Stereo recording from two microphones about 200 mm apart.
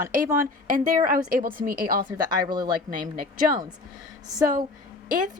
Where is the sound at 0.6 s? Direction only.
40° right (ahead or behind).